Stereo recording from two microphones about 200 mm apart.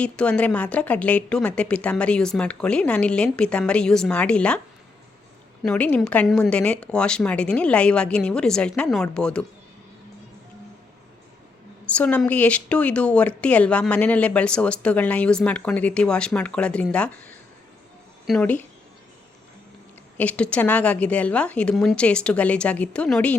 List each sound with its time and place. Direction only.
0.0 s a woman's voice: 5° left (ahead or behind)
5.6 s a woman's voice: 5° left (ahead or behind)
11.9 s a woman's voice: 5° left (ahead or behind)
20.1 s speech: 5° left (ahead or behind)